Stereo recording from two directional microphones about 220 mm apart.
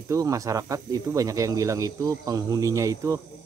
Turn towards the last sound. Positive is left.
turn(degrees=-15)  # may be behind; listen again after turning